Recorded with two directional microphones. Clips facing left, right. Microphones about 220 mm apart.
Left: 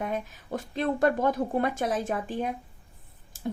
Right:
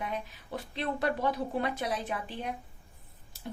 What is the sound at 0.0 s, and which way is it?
Speech, 45° left (ahead or behind).